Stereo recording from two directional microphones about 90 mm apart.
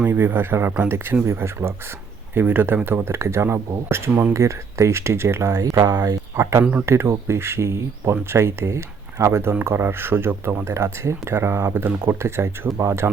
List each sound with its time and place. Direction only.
0.0 s speech: 25° right (ahead or behind); by 6.4 s 45° right (ahead or behind)
6.4 s speech: 30° right (ahead or behind)